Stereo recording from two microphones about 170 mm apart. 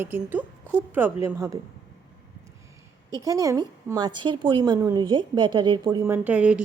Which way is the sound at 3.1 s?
20° right (ahead or behind).